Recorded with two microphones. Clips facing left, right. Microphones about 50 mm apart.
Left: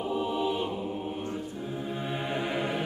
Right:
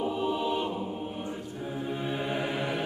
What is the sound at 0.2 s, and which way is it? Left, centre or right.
Choir, centre.